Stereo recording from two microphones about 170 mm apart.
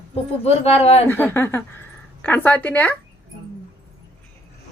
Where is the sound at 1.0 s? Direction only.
10° left (ahead or behind).